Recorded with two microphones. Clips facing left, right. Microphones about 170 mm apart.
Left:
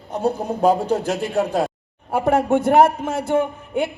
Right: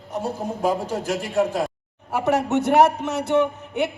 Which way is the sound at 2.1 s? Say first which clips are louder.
Left 3 dB; 50° left (ahead or behind).